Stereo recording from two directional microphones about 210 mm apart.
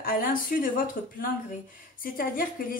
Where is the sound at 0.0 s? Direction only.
45° left (ahead or behind).